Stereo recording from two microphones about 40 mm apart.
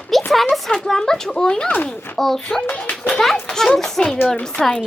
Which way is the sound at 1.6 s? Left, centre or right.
Left.